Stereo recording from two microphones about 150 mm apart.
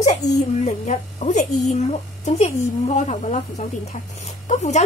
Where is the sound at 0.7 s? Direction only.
50° left (ahead or behind).